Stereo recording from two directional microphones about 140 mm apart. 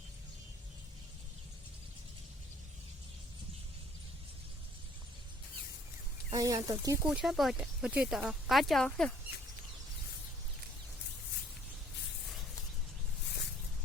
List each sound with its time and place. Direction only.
6.3 s speech: 25° right (ahead or behind)
7.1 s speech: 5° right (ahead or behind)